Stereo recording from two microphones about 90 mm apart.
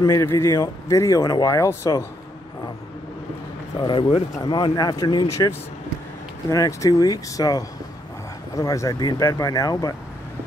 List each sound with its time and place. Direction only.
0.0 s speech: 35° left (ahead or behind)
1.5 s speech: 30° left (ahead or behind)
3.7 s speech: 70° left (ahead or behind)
4.4 s speech: 60° left (ahead or behind)
6.5 s speech: 40° left (ahead or behind)